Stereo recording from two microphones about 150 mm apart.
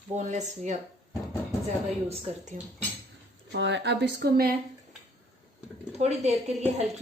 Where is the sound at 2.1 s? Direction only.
50° right (ahead or behind).